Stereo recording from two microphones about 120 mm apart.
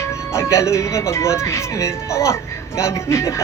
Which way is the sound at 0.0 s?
25° left (ahead or behind).